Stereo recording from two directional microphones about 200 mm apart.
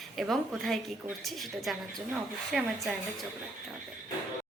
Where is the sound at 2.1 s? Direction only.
5° right (ahead or behind).